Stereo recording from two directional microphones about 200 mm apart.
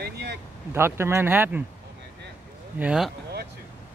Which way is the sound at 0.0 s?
55° right (ahead or behind).